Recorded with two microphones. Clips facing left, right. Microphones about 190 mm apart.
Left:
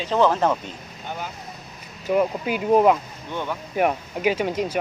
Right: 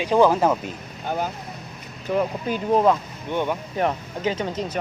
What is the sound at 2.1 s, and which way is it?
Speech, 10° left (ahead or behind).